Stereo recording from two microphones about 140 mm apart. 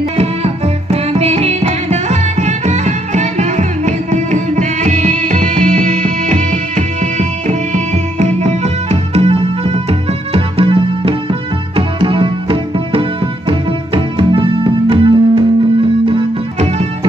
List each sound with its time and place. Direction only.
0.2 s music: 45° right (ahead or behind); by 6.4 s 75° right (ahead or behind)
7.0 s music: 65° right (ahead or behind); by 16.8 s 50° right (ahead or behind)